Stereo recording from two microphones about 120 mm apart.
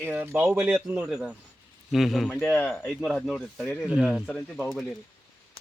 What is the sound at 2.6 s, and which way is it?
Speech, 10° left (ahead or behind).